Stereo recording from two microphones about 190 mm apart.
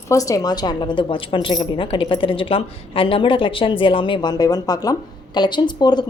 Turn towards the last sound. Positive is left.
turn(degrees=20)  # may be behind; listen again after turning